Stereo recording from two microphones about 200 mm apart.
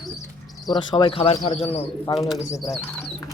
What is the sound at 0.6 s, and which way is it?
Speech, 25° left (ahead or behind).